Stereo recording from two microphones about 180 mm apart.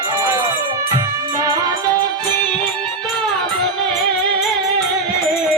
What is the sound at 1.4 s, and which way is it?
Music, 20° right (ahead or behind).